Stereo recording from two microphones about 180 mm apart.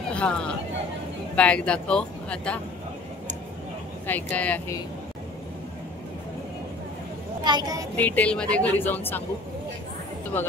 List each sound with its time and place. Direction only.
0.1 s speech: 5° left (ahead or behind)
4.1 s speech: 10° left (ahead or behind)
7.4 s a woman's voice: 20° right (ahead or behind)
7.9 s speech: 10° left (ahead or behind)